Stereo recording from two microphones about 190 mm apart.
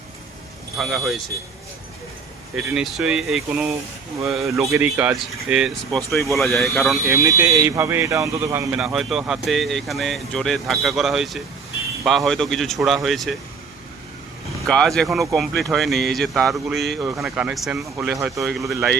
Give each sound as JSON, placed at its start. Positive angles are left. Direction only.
{"t": 0.8, "sound": "speech", "side_deg": 0}
{"t": 2.6, "sound": "speech", "side_deg": -5}
{"t": 7.0, "sound": "speech", "side_deg": -15}
{"t": 14.7, "sound": "speech", "side_deg": 5}
{"t": 17.0, "sound": "speech", "side_deg": -15}
{"t": 17.2, "sound": "speech", "side_deg": -5}